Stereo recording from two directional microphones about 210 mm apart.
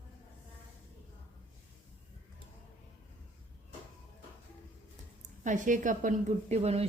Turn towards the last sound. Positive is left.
turn(degrees=-30)  # may be behind; listen again after turning